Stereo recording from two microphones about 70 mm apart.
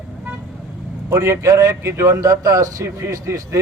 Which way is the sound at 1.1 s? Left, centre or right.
Right.